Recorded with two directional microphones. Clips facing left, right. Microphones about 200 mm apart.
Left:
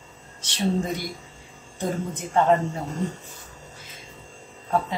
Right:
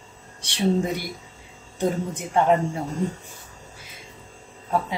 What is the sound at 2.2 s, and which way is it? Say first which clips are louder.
Speech: left 1 dB; 10° right (ahead or behind).